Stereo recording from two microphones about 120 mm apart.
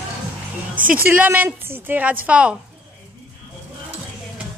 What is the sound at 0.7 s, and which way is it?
A woman's voice, 15° right (ahead or behind).